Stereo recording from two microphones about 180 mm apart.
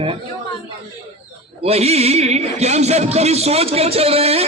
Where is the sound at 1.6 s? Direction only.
35° right (ahead or behind).